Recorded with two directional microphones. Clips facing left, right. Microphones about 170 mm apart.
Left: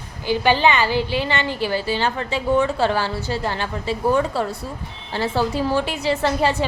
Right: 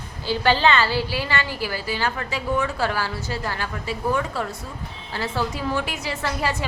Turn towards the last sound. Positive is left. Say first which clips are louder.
# left 7 dB
turn(degrees=25)  # may be behind; listen again after turning